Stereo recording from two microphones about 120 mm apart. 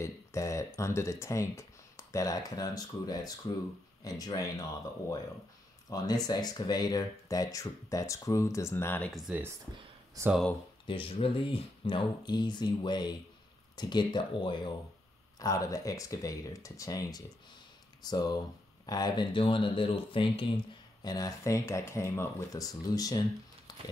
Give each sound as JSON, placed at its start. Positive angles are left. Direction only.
{"t": 0.0, "sound": "speech", "side_deg": 25}
{"t": 5.9, "sound": "speech", "side_deg": 30}
{"t": 10.2, "sound": "speech", "side_deg": -30}
{"t": 10.9, "sound": "speech", "side_deg": 50}
{"t": 21.0, "sound": "speech", "side_deg": 30}